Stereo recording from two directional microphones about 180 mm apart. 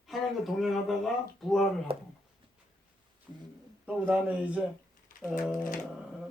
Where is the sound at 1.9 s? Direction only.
30° right (ahead or behind).